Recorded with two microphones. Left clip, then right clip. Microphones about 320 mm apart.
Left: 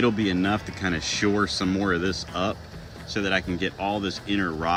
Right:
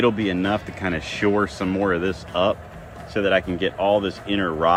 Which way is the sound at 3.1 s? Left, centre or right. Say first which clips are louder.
Right 5 dB; centre.